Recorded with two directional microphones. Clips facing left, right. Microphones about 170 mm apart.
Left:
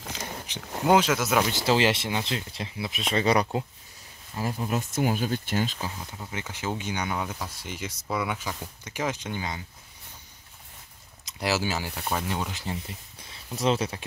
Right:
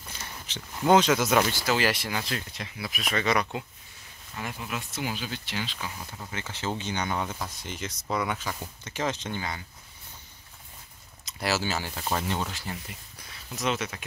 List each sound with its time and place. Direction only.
0.0 s a sound: 90° left
0.5 s a sound: 15° left (ahead or behind)
0.8 s speech: 5° left (ahead or behind)
1.4 s speech: 25° left (ahead or behind); by 5.9 s 45° left (ahead or behind)
6.3 s speech: 15° left (ahead or behind)
11.2 s speech: 15° left (ahead or behind)
12.5 s speech: 25° left (ahead or behind)